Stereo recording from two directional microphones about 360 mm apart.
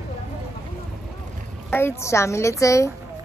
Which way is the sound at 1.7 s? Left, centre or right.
Centre.